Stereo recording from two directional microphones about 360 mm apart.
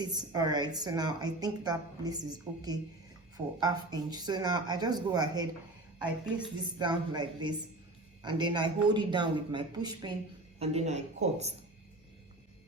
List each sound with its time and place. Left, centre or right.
0.0 s a woman's voice: centre
6.7 s a woman's voice: centre